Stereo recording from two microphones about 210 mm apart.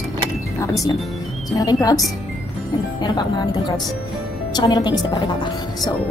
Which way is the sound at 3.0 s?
20° left (ahead or behind).